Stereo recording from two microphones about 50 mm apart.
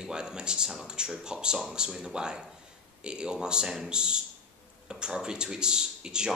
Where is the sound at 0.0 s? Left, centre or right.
Centre.